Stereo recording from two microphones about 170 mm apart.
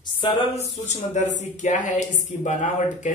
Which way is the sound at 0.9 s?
45° left (ahead or behind).